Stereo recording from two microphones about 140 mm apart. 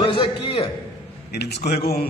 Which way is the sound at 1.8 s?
90° left.